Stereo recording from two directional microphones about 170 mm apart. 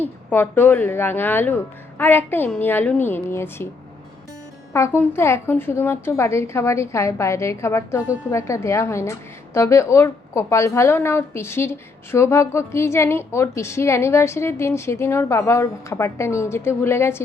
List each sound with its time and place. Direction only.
0.0 s a woman's voice: 10° left (ahead or behind)
4.7 s a woman's voice: 15° left (ahead or behind)